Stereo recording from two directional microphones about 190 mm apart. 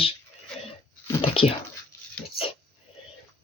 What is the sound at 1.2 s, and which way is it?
Dog, 30° left (ahead or behind).